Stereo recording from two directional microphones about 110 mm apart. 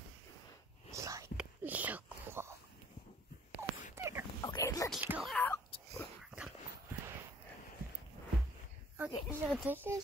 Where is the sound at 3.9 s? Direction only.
25° right (ahead or behind).